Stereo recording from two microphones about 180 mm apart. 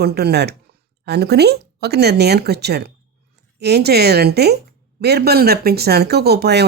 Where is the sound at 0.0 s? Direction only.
60° right (ahead or behind).